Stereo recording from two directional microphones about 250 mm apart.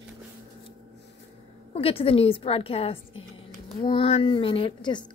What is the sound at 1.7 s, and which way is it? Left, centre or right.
A woman's voice, left.